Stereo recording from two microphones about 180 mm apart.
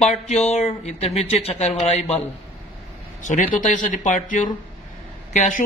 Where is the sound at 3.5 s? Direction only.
45° left (ahead or behind).